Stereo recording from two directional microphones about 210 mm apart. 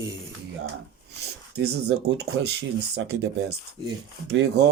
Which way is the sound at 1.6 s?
50° right (ahead or behind).